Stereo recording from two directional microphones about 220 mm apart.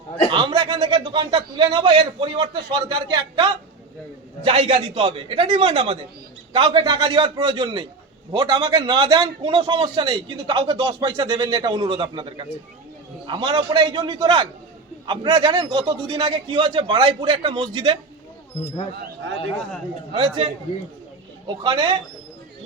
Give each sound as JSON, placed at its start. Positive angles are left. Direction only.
{"t": 0.3, "sound": "a man's voice", "side_deg": -20}
{"t": 20.1, "sound": "a man's voice", "side_deg": -25}